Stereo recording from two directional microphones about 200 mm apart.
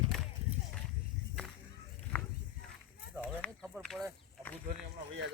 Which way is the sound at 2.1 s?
5° left (ahead or behind).